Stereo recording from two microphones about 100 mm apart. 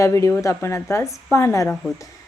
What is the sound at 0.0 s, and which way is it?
A woman's voice, 30° left (ahead or behind).